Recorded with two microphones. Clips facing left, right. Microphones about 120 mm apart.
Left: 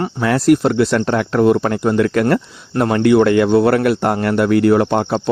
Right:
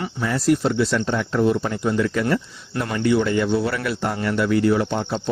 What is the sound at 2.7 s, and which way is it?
Speech, 55° left (ahead or behind).